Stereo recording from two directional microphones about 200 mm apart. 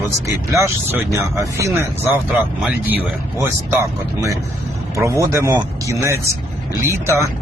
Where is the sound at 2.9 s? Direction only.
10° right (ahead or behind).